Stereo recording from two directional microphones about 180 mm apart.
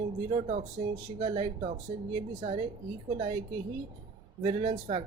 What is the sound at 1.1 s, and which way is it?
Speech, 30° right (ahead or behind).